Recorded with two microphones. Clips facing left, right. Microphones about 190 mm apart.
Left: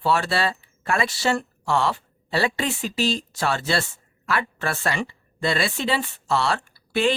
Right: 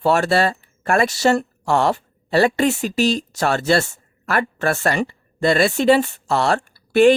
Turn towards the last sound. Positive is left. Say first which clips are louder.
# right 9 dB
turn(degrees=-50)  # may be behind; listen again after turning